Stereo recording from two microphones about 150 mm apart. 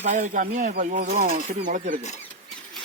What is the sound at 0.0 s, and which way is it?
Speech, 55° right (ahead or behind).